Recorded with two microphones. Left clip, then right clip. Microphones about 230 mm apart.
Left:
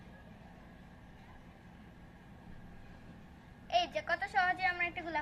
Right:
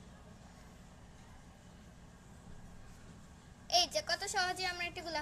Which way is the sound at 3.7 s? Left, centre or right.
Right.